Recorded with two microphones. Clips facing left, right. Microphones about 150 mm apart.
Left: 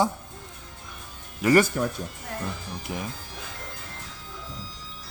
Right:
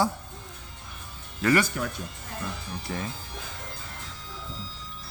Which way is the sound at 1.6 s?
40° left (ahead or behind).